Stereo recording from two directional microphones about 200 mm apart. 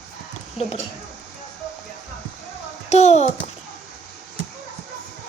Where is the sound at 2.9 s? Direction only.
35° left (ahead or behind).